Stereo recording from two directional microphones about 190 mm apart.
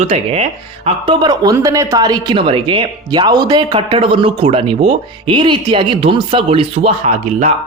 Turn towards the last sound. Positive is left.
turn(degrees=-35)  # may be behind; listen again after turning